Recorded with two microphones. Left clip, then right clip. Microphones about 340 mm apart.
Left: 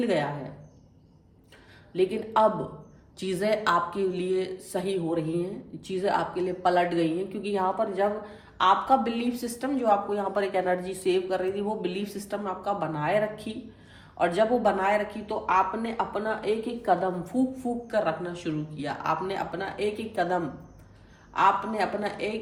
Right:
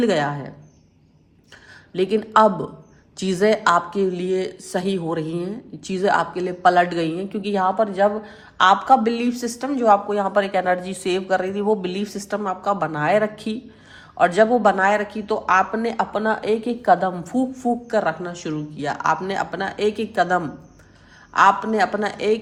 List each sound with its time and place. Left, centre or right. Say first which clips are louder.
0.0 s speech: right 7 dB; right
1.9 s speech: right 7 dB; right